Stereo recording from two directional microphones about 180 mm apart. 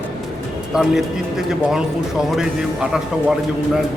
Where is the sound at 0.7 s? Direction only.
Centre (ahead or behind).